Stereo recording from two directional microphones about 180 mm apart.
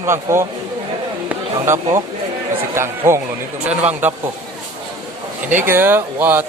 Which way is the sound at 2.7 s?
15° right (ahead or behind).